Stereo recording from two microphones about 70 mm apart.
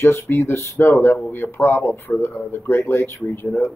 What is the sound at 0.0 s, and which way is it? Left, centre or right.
Speech, left.